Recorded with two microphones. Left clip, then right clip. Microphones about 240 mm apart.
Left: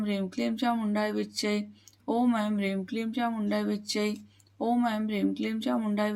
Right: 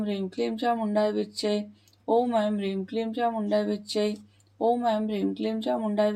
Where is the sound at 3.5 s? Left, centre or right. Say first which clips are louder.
Right 4 dB; left.